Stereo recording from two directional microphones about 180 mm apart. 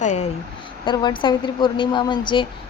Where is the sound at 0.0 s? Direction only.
40° left (ahead or behind).